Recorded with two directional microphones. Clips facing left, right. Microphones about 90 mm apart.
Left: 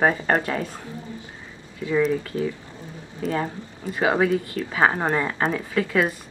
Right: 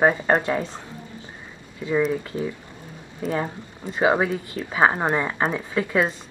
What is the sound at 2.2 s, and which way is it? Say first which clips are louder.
Speech: left 2 dB; 20° right (ahead or behind).